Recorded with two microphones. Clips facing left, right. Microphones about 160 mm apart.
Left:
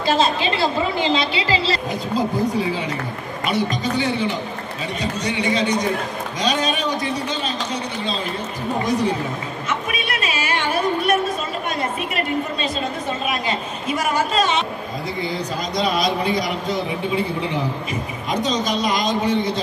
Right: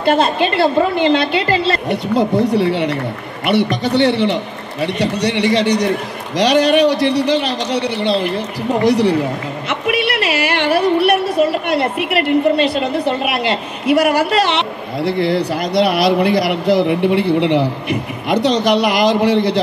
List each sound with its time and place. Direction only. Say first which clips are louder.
0.0 s a woman's voice: right 5 dB; 60° right (ahead or behind)